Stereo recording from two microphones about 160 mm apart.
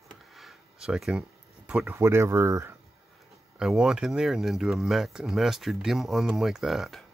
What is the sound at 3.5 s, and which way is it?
Speech, 5° right (ahead or behind).